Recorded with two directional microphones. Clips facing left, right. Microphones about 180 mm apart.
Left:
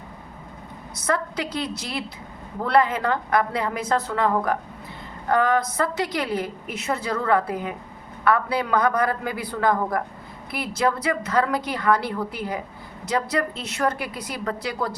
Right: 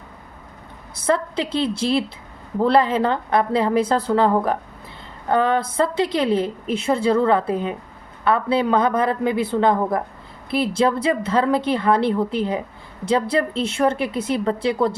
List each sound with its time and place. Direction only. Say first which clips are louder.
0.9 s a woman's voice: right 5 dB; 30° right (ahead or behind)